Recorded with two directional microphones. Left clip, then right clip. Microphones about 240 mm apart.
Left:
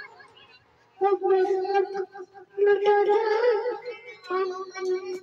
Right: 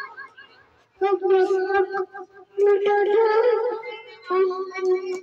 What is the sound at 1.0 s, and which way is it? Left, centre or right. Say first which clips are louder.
Speech: right 3 dB; centre.